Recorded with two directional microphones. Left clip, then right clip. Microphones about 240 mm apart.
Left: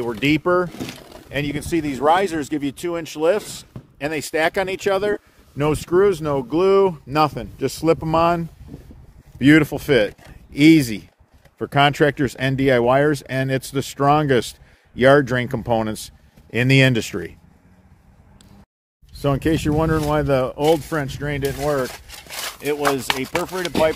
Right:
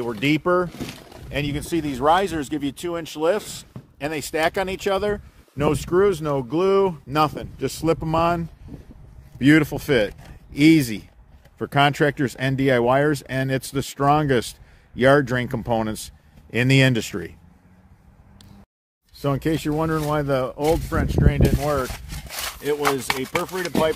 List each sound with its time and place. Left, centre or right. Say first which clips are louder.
0.0 s speech: left 2 dB; centre
0.7 s speech: left 2 dB; left
1.3 s speech: left 2 dB; centre
19.2 s speech: left 3 dB; centre
21.5 s speech: left 2 dB; centre